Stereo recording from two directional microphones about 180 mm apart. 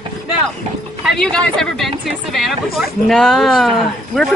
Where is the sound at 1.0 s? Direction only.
5° left (ahead or behind).